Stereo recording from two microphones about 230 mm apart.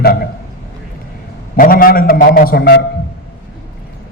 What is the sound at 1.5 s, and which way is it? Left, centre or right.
A man's voice, left.